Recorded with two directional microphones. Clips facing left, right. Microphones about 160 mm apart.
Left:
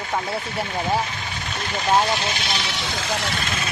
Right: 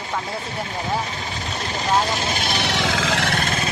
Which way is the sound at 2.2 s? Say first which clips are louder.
Right 3 dB; 45° right (ahead or behind).